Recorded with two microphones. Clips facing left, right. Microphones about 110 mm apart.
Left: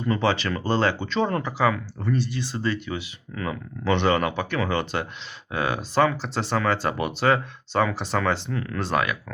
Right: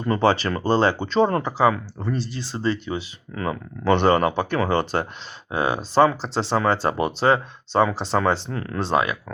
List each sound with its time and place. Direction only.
0.0 s speech: 40° right (ahead or behind)